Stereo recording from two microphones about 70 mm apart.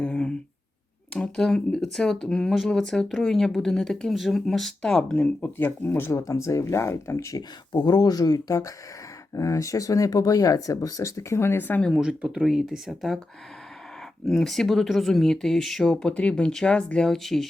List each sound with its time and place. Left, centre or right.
0.0 s a sound: centre
1.1 s speech: centre; by 7.3 s left
7.3 s speech: left
11.9 s speech: centre
14.3 s speech: centre
17.1 s speech: centre